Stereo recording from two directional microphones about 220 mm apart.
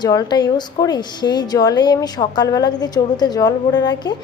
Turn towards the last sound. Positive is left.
turn(degrees=20)  # may be behind; listen again after turning